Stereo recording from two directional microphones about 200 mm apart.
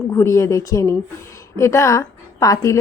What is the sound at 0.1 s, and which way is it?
A woman's voice, 15° left (ahead or behind).